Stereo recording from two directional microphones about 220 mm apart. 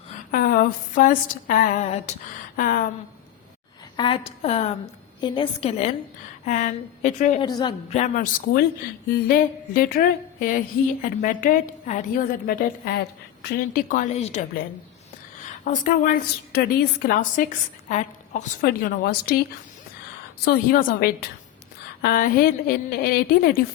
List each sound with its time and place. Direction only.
0.1 s a woman's voice: 40° left (ahead or behind)
3.9 s a woman's voice: 20° left (ahead or behind)
7.4 s a woman's voice: 20° left (ahead or behind)
7.9 s a woman's voice: 35° left (ahead or behind)
15.4 s a woman's voice: 35° left (ahead or behind)
20.4 s a woman's voice: 40° left (ahead or behind)